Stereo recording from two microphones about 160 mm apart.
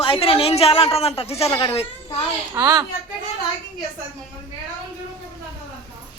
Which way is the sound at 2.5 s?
20° right (ahead or behind).